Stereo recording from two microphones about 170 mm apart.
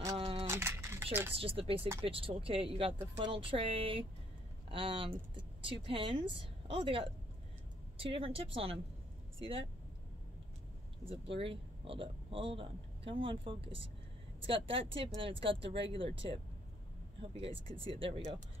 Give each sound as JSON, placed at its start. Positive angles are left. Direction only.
{"t": 0.0, "sound": "a sound", "side_deg": -20}
{"t": 1.4, "sound": "a man's voice", "side_deg": -35}
{"t": 11.3, "sound": "a man's voice", "side_deg": -30}